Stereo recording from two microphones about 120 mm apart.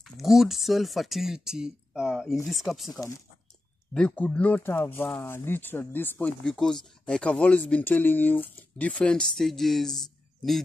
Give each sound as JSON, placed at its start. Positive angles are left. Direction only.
{"t": 0.0, "sound": "speech", "side_deg": 0}
{"t": 3.9, "sound": "speech", "side_deg": 10}
{"t": 6.4, "sound": "speech", "side_deg": 5}